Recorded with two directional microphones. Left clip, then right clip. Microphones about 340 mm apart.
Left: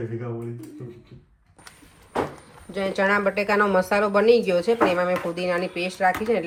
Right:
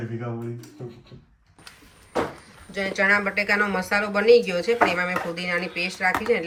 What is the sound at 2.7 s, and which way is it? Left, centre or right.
Speech, centre.